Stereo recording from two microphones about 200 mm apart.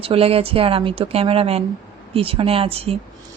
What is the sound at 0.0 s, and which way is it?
A woman's voice, 30° right (ahead or behind).